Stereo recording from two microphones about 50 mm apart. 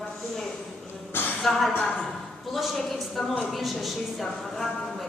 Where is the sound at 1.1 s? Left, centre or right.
Left.